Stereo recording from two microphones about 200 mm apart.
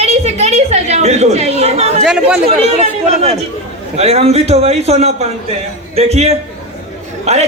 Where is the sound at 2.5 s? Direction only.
30° right (ahead or behind).